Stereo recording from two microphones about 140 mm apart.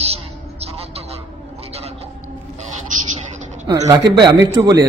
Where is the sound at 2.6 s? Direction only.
60° right (ahead or behind).